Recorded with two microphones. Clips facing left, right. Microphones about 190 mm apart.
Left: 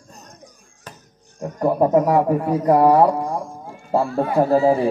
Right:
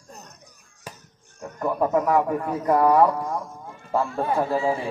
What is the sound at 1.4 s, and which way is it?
A man's voice, 35° left (ahead or behind).